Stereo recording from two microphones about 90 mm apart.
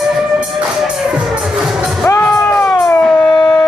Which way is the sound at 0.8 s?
5° right (ahead or behind).